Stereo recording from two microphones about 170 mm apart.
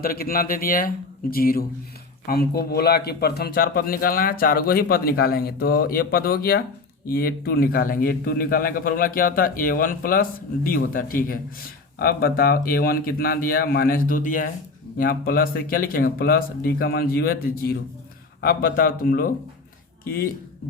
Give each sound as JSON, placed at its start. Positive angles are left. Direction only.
{"t": 0.0, "sound": "a man's voice", "side_deg": 60}
{"t": 11.9, "sound": "a man's voice", "side_deg": 65}
{"t": 14.9, "sound": "a man's voice", "side_deg": 60}